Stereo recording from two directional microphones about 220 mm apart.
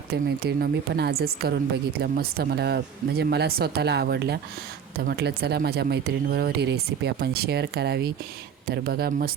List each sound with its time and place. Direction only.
0.1 s a woman's voice: 45° right (ahead or behind)